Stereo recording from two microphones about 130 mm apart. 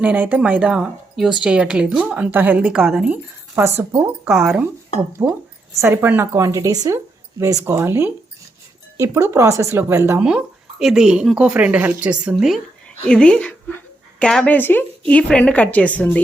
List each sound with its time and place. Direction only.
0.0 s a woman's voice: 10° right (ahead or behind)
5.8 s a woman's voice: 15° right (ahead or behind)
10.2 s a woman's voice: 5° right (ahead or behind)